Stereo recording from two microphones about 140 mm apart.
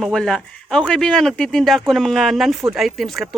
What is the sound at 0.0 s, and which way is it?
Speech, 5° left (ahead or behind).